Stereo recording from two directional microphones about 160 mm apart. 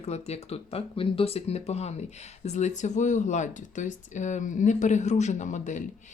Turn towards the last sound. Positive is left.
turn(degrees=50)  # may be behind; listen again after turning